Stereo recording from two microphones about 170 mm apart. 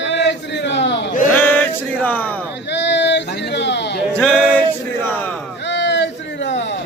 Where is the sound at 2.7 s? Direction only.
90° left.